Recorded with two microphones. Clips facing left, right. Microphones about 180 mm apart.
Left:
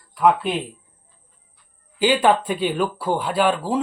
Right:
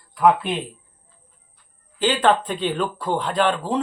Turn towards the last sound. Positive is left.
turn(degrees=10)  # may be behind; listen again after turning